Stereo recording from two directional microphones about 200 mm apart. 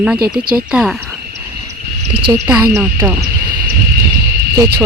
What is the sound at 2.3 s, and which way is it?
Speech, 15° right (ahead or behind).